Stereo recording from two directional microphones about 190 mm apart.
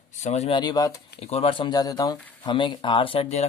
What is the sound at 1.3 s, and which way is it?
Speech, 30° left (ahead or behind).